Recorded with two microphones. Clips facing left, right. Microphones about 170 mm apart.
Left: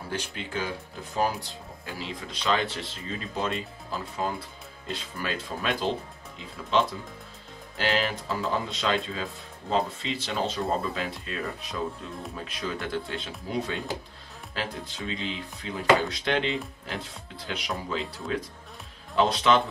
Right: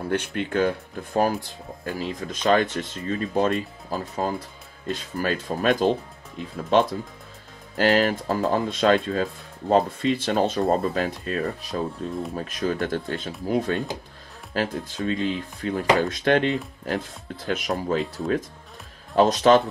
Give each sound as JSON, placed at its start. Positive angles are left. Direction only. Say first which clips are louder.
{"t": 0.1, "sound": "speech", "louder": "right 8 dB", "side_deg": -60}
{"t": 14.5, "sound": "speech", "louder": "right 8 dB", "side_deg": -45}